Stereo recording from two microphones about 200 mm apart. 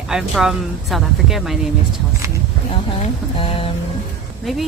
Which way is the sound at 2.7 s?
25° left (ahead or behind).